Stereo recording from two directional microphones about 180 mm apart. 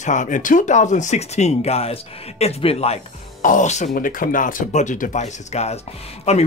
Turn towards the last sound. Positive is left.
turn(degrees=35)  # may be behind; listen again after turning